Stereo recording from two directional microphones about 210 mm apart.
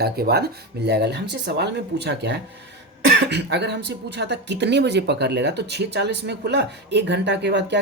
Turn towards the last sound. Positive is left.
turn(degrees=-55)  # may be behind; listen again after turning